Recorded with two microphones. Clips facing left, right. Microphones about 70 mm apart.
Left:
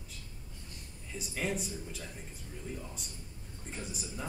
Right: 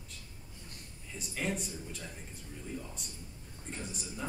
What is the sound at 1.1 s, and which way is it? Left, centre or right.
Speech, centre.